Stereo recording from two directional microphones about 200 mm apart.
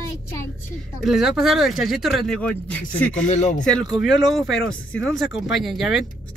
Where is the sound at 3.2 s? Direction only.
35° left (ahead or behind).